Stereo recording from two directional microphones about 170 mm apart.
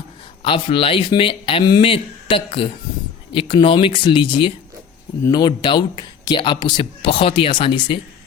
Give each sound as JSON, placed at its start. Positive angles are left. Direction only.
{"t": 0.4, "sound": "speech", "side_deg": 30}